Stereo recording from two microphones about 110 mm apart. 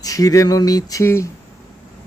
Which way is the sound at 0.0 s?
35° left (ahead or behind).